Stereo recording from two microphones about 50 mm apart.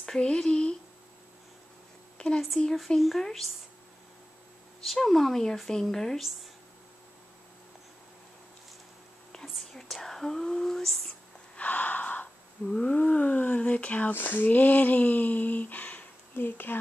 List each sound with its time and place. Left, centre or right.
0.0 s a sound: centre
0.3 s speech: centre
2.1 s a sound: centre
3.0 s a woman's voice: centre
4.8 s a woman's voice: centre
9.3 s whispering: centre
10.0 s a sound: centre
11.5 s gasp: left
12.8 s speech: left